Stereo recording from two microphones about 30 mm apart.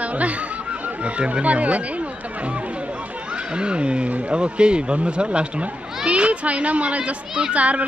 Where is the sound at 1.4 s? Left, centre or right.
Right.